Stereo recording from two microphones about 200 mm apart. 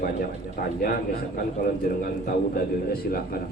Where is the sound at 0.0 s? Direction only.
45° left (ahead or behind).